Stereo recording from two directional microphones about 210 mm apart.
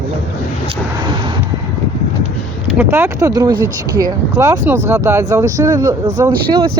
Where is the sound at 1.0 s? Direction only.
20° right (ahead or behind).